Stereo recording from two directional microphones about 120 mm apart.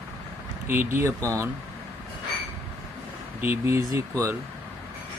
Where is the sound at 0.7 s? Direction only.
20° right (ahead or behind).